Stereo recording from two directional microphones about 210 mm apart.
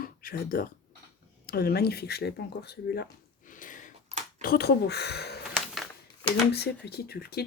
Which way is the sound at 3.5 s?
40° left (ahead or behind).